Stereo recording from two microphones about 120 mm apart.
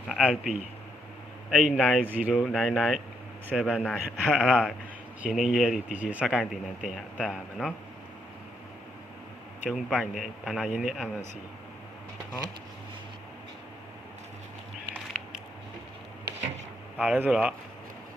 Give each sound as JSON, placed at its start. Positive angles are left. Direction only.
{"t": 0.1, "sound": "a man's voice", "side_deg": -5}
{"t": 9.6, "sound": "speech", "side_deg": 0}
{"t": 17.0, "sound": "speech", "side_deg": -10}